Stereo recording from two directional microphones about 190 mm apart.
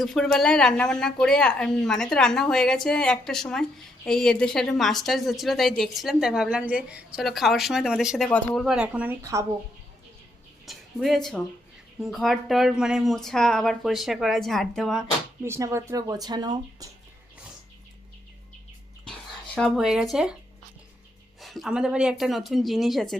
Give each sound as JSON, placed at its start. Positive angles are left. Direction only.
{"t": 0.0, "sound": "speech", "side_deg": 0}
{"t": 10.7, "sound": "speech", "side_deg": 0}
{"t": 15.4, "sound": "speech", "side_deg": -15}
{"t": 19.5, "sound": "speech", "side_deg": 0}
{"t": 21.4, "sound": "speech", "side_deg": 0}